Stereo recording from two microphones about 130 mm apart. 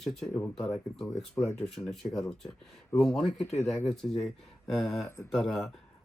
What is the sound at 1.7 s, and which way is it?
Speech, centre (ahead or behind).